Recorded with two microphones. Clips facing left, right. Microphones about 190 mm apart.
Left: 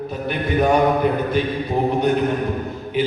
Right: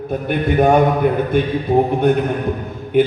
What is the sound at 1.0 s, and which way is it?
Music, 50° right (ahead or behind).